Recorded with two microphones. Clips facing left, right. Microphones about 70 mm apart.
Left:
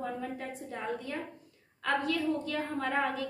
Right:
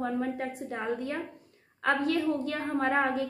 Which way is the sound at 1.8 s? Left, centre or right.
Right.